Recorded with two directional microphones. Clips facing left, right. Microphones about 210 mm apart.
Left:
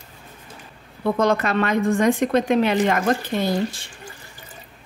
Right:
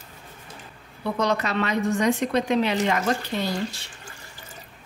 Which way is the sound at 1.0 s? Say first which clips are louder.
Left 5 dB; 50° left (ahead or behind).